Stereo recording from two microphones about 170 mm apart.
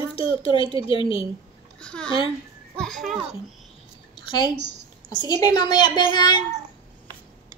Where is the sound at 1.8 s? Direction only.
5° left (ahead or behind).